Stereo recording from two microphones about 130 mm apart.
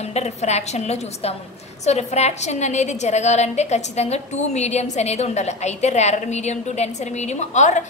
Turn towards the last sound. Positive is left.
turn(degrees=65)  # may be behind; listen again after turning